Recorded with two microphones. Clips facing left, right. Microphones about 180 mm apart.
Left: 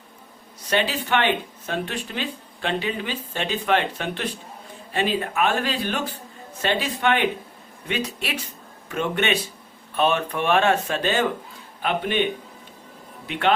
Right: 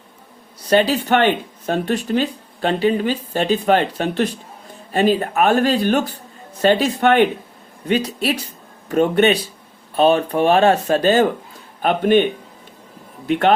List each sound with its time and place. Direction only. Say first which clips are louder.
0.7 s speech: right 7 dB; 40° right (ahead or behind)